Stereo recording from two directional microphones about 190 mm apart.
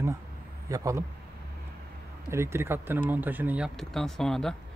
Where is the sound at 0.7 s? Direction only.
15° right (ahead or behind).